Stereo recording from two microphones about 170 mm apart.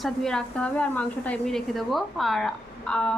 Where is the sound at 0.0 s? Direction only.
Centre (ahead or behind).